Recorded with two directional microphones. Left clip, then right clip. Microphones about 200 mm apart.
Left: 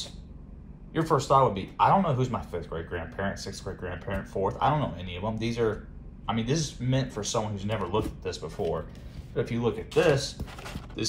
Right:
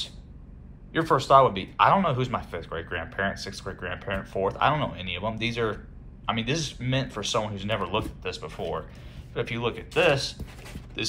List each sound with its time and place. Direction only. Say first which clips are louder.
0.9 s speech: right 4 dB; 15° left (ahead or behind)
10.3 s speech: left 3 dB; centre (ahead or behind)